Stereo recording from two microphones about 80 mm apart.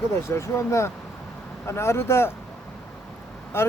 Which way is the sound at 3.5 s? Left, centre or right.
Left.